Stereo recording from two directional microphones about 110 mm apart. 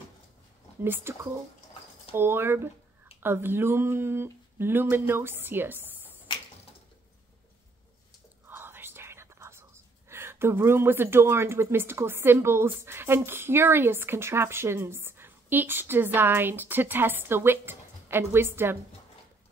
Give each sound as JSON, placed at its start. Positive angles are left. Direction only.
{"t": 0.8, "sound": "speech", "side_deg": -20}
{"t": 2.1, "sound": "speech", "side_deg": -20}
{"t": 8.5, "sound": "speech", "side_deg": -20}